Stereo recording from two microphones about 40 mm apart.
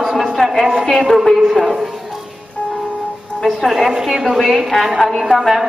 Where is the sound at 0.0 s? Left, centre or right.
Centre.